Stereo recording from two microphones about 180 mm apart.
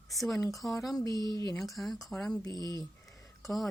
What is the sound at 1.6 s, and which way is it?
A woman's voice, centre (ahead or behind).